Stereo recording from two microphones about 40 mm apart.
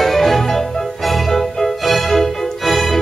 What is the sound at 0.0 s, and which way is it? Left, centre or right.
Music, centre.